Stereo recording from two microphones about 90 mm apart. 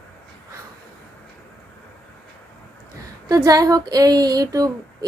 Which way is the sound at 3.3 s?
45° right (ahead or behind).